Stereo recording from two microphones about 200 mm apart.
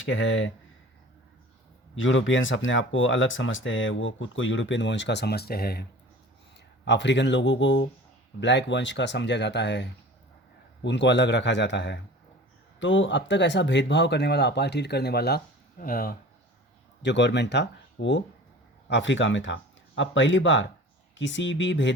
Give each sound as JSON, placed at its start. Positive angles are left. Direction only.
{"t": 0.0, "sound": "speech", "side_deg": 70}
{"t": 2.0, "sound": "speech", "side_deg": 70}
{"t": 6.8, "sound": "speech", "side_deg": 60}
{"t": 10.8, "sound": "speech", "side_deg": 60}
{"t": 17.0, "sound": "speech", "side_deg": 60}